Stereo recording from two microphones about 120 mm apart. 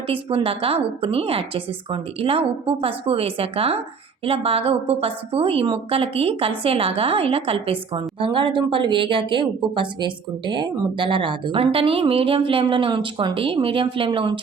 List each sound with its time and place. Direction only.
0.1 s a woman's voice: 50° right (ahead or behind)